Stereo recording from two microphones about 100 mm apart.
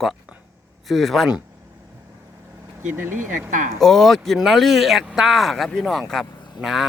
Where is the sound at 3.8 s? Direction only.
5° left (ahead or behind).